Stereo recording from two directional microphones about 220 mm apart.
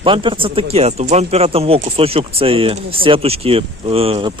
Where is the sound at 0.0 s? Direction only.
25° right (ahead or behind).